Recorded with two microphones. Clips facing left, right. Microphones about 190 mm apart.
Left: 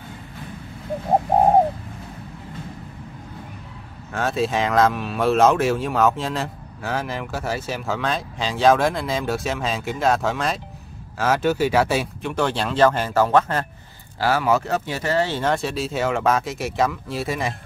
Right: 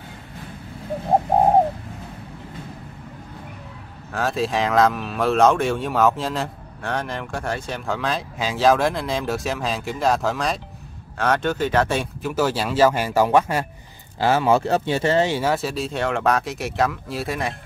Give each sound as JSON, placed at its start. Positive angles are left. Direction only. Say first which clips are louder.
{"t": 4.1, "sound": "speech", "louder": "left 1 dB", "side_deg": 0}
{"t": 14.2, "sound": "speech", "louder": "right 2 dB", "side_deg": -25}
{"t": 15.2, "sound": "speech", "louder": "right 1 dB", "side_deg": -10}